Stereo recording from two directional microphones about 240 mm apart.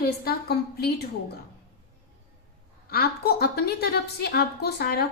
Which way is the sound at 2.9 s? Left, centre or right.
Left.